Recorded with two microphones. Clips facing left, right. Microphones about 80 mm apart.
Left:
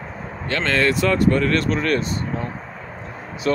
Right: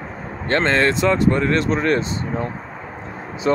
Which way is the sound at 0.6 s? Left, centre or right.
Right.